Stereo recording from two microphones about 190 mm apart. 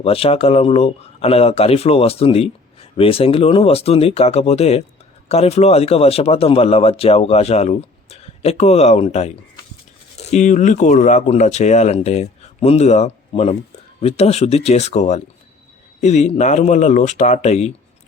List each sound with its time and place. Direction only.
0.0 s speech: 30° left (ahead or behind)